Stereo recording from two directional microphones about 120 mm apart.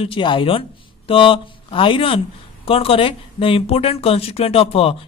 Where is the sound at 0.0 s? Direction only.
45° left (ahead or behind).